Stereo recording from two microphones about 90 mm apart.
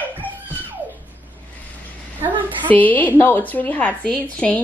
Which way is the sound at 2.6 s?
20° left (ahead or behind).